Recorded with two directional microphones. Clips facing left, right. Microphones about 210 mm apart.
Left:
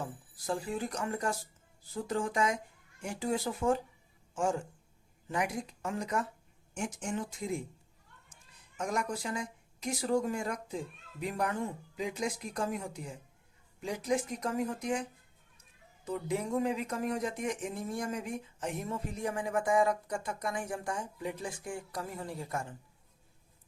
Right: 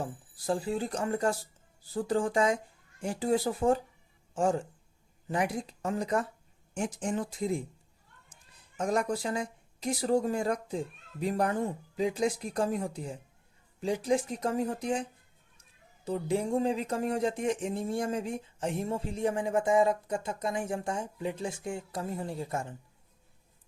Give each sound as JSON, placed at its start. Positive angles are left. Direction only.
{"t": 0.0, "sound": "speech", "side_deg": -30}
{"t": 8.8, "sound": "speech", "side_deg": -35}
{"t": 16.0, "sound": "speech", "side_deg": -30}